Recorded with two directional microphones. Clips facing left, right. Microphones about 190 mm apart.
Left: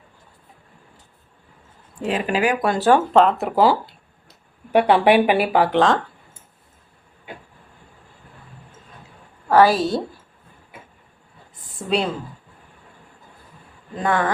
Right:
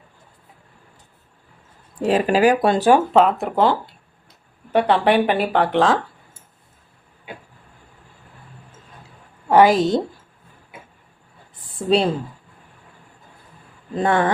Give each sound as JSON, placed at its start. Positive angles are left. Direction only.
{"t": 2.0, "sound": "speech", "side_deg": -35}
{"t": 2.7, "sound": "speech", "side_deg": -15}
{"t": 3.1, "sound": "speech", "side_deg": -5}
{"t": 9.5, "sound": "a woman's voice", "side_deg": -20}
{"t": 11.9, "sound": "speech", "side_deg": -30}
{"t": 14.0, "sound": "a woman's voice", "side_deg": -25}